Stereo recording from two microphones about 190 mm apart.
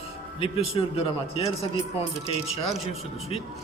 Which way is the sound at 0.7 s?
30° left (ahead or behind).